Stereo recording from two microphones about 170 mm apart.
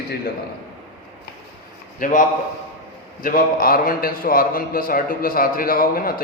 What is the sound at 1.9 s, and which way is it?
Speech, 50° left (ahead or behind).